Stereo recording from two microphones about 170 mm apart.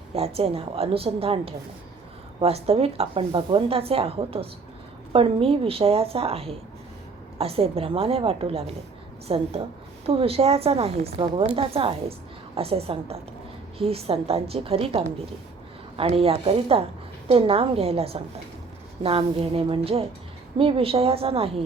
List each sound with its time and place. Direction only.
0.1 s speech: 35° right (ahead or behind)